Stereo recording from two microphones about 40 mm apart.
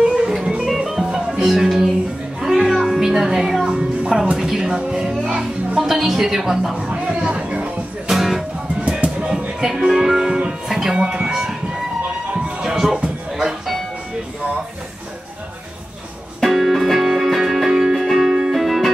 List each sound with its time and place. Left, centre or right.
0.0 s music: right
0.7 s music: centre
2.4 s music: centre
3.0 s music: centre
3.7 s music: right
4.4 s a sound: centre
4.6 s music: centre
6.9 s music: right
8.1 s music: centre
8.8 s music: right
9.8 s music: centre
16.4 s music: centre